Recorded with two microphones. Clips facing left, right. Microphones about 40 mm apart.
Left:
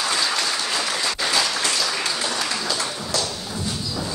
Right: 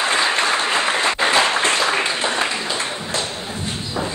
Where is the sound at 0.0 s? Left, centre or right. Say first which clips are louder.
Right 5 dB; right.